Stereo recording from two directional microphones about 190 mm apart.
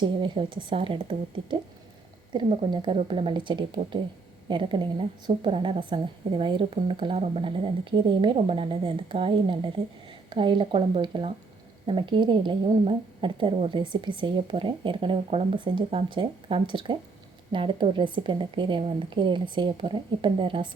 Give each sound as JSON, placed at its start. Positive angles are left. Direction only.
{"t": 0.0, "sound": "a woman's voice", "side_deg": -25}